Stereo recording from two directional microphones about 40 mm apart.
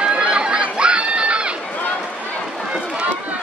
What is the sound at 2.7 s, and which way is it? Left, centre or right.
Run, right.